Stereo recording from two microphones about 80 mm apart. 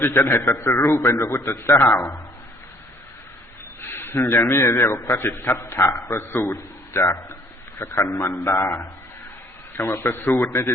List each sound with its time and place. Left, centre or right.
0.0 s a man's voice: left
3.8 s a sound: left
4.4 s a man's voice: left
5.7 s a man's voice: left